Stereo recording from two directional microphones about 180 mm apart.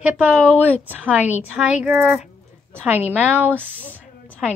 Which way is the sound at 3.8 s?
10° left (ahead or behind).